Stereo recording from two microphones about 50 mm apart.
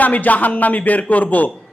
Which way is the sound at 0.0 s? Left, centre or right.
Left.